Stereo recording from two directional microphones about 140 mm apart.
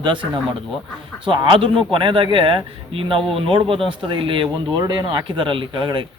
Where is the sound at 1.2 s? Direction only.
35° right (ahead or behind).